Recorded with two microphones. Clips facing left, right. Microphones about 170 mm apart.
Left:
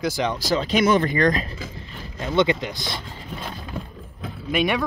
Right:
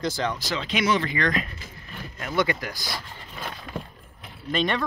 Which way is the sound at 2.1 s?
25° left (ahead or behind).